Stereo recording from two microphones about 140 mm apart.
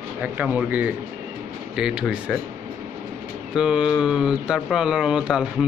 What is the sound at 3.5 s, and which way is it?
Speech, 5° right (ahead or behind).